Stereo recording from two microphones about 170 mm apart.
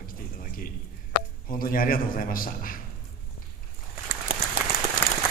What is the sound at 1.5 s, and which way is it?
A man's voice, 55° left (ahead or behind).